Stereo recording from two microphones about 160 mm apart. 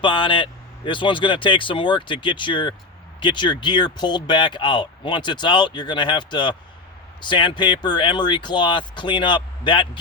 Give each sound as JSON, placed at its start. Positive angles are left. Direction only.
{"t": 0.0, "sound": "speech", "side_deg": 30}